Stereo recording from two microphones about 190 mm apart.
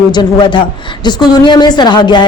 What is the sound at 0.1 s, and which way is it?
A woman's voice, 25° left (ahead or behind).